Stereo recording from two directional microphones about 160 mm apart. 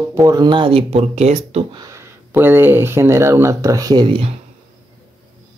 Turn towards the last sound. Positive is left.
turn(degrees=-30)  # may be behind; listen again after turning